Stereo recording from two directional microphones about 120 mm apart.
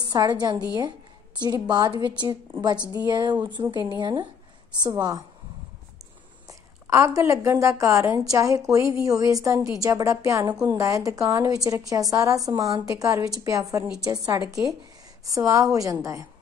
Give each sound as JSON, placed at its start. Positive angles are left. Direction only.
{"t": 0.0, "sound": "a woman's voice", "side_deg": -35}
{"t": 6.4, "sound": "a woman's voice", "side_deg": -25}